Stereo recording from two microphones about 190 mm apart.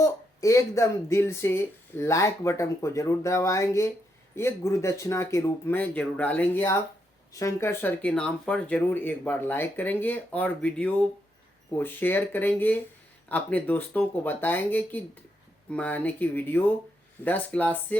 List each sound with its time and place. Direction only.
0.0 s speech: 15° left (ahead or behind)